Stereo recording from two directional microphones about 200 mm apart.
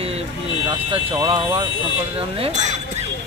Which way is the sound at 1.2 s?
25° right (ahead or behind).